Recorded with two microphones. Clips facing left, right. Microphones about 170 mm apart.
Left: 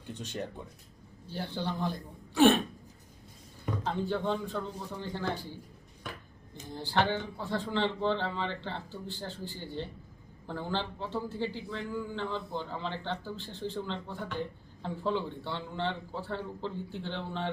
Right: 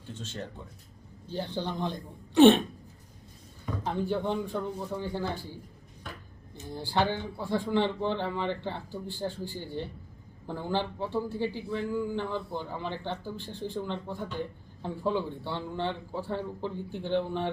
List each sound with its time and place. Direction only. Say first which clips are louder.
0.1 s speech: left 2 dB; 15° left (ahead or behind)
1.3 s a man's voice: right 2 dB; 15° right (ahead or behind)
3.8 s a man's voice: right 2 dB; 15° right (ahead or behind)
6.7 s a man's voice: right 1 dB; 10° right (ahead or behind)